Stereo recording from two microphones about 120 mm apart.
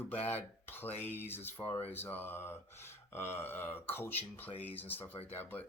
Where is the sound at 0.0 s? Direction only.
15° left (ahead or behind).